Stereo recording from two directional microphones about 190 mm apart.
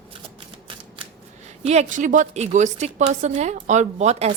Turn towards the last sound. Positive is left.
turn(degrees=-35)  # may be behind; listen again after turning